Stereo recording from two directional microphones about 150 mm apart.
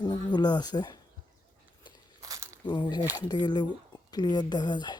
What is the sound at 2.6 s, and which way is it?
Speech, 30° left (ahead or behind).